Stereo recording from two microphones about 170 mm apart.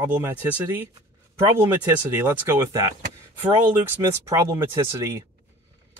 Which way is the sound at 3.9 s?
15° right (ahead or behind).